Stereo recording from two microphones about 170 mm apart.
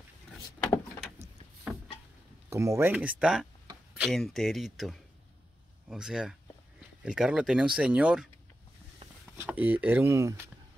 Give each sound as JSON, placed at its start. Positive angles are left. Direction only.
{"t": 2.5, "sound": "speech", "side_deg": -15}
{"t": 9.0, "sound": "a sound", "side_deg": -35}
{"t": 9.4, "sound": "speech", "side_deg": -10}